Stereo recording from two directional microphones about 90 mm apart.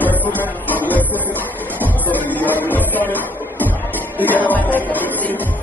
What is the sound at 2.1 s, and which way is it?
Music, 20° left (ahead or behind).